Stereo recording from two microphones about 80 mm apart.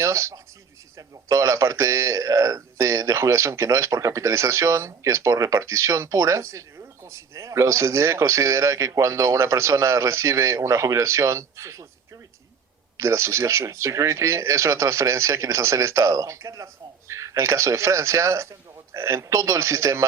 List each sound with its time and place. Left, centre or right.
0.0 s a man's voice: right
13.0 s a man's voice: right